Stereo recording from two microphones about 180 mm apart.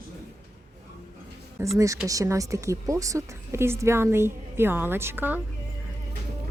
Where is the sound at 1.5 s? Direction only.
15° right (ahead or behind).